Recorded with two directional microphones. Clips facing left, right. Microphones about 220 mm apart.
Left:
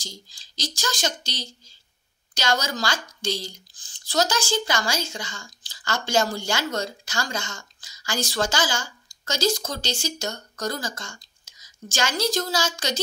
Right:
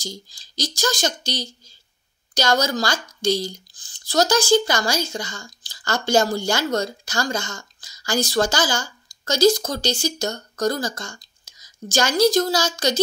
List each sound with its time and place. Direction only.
0.0 s speech: 40° right (ahead or behind)